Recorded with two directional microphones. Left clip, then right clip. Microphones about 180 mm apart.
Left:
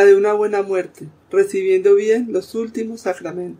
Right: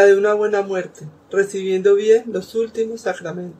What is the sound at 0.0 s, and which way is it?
Speech, 50° left (ahead or behind).